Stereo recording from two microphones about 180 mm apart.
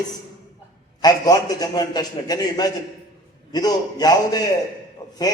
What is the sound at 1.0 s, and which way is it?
A man's voice, 20° left (ahead or behind).